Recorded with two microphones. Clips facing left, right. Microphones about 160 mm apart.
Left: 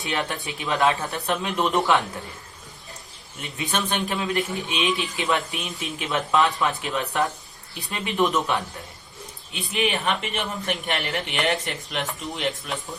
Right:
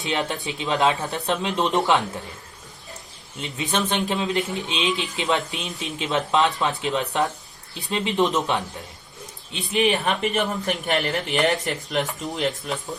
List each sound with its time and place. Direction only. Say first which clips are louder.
0.0 s a man's voice: right 2 dB; 20° right (ahead or behind)
3.4 s a man's voice: right 2 dB; 20° right (ahead or behind)
9.5 s speech: right 4 dB; 30° right (ahead or behind)